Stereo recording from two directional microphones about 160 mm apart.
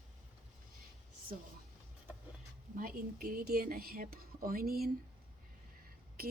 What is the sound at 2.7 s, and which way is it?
Speech, 65° right (ahead or behind).